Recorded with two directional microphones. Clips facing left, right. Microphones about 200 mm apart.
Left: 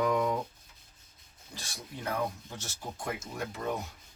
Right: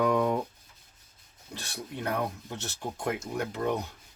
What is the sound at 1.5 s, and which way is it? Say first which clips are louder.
Speech: right 5 dB; 65° right (ahead or behind).